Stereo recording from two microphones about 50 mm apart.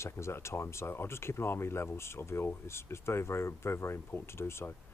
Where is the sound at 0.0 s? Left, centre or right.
Left.